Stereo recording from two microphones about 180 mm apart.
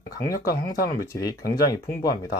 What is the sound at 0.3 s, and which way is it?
Speech, 20° left (ahead or behind).